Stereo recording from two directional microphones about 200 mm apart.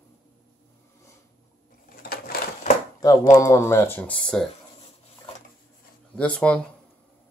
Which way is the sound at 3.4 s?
15° left (ahead or behind).